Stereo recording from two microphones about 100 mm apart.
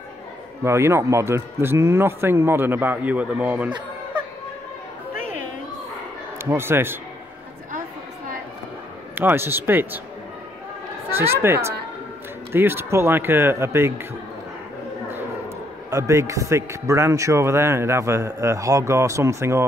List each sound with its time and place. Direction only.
0.7 s a man's voice: 25° right (ahead or behind)
6.3 s speech: 25° right (ahead or behind)
9.1 s a man's voice: 20° right (ahead or behind)
11.1 s a man's voice: 25° right (ahead or behind)
15.9 s a man's voice: 30° right (ahead or behind)